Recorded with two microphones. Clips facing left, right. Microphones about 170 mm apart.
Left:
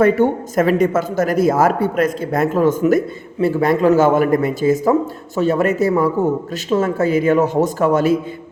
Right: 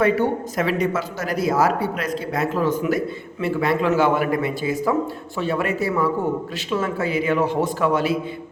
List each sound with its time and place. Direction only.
0.0 s speech: 45° left (ahead or behind)